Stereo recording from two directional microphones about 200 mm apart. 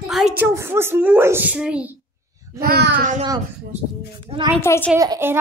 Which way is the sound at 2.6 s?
50° right (ahead or behind).